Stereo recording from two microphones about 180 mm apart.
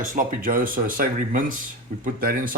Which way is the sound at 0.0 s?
45° right (ahead or behind).